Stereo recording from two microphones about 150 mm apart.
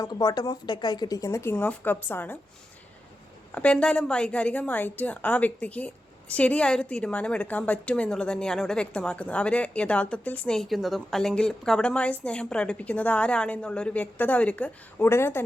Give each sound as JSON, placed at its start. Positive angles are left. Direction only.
{"t": 0.0, "sound": "speech", "side_deg": 25}
{"t": 3.5, "sound": "a woman's voice", "side_deg": 10}